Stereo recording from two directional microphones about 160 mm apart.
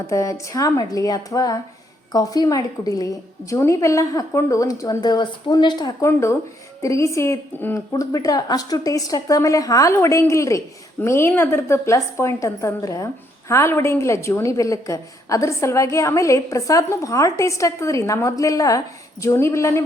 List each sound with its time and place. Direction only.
0.1 s a woman's voice: 20° left (ahead or behind)
6.1 s a woman's voice: 15° left (ahead or behind)